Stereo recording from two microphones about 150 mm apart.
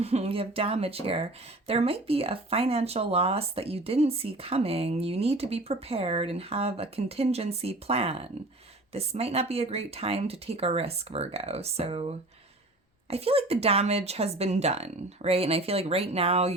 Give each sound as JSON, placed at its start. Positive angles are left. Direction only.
{"t": 0.0, "sound": "a woman's voice", "side_deg": -45}